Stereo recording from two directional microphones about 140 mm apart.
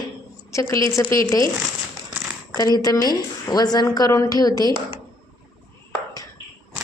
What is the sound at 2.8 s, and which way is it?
A woman's voice, 25° left (ahead or behind).